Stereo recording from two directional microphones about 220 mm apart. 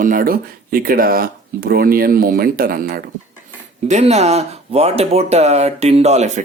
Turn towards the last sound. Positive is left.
turn(degrees=-30)  # may be behind; listen again after turning